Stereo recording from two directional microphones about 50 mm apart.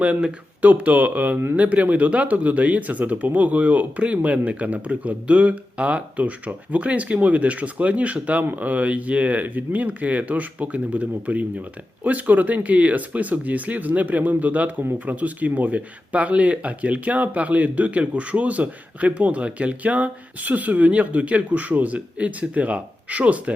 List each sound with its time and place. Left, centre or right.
0.6 s speech: right